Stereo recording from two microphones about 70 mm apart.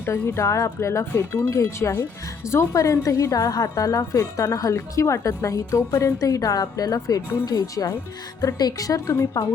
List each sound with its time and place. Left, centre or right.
0.0 s speech: left
7.5 s speech: left
8.4 s a woman's voice: left